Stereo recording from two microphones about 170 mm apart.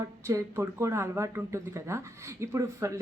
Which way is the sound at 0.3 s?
15° right (ahead or behind).